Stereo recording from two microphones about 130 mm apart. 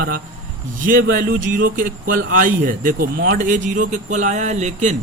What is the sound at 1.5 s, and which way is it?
Speech, 90° right.